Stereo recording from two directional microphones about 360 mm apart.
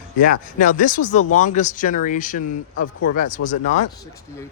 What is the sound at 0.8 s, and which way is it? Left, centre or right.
Speech, left.